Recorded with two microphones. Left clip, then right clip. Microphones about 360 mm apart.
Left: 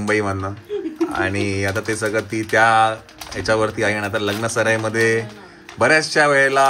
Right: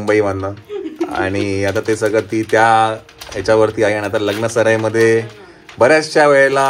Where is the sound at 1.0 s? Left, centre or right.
Centre.